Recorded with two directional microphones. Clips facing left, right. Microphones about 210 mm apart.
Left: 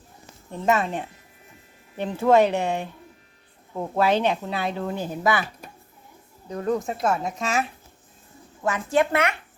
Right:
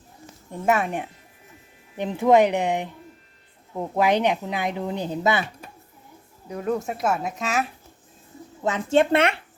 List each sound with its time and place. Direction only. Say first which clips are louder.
0.5 s speech: even; 10° right (ahead or behind)
6.5 s speech: left 1 dB; 5° right (ahead or behind)
8.6 s speech: right 2 dB; 25° right (ahead or behind)